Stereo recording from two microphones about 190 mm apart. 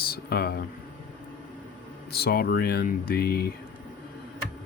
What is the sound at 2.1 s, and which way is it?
Speech, 55° left (ahead or behind).